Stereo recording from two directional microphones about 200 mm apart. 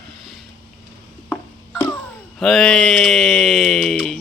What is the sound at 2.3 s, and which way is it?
Speech, centre (ahead or behind).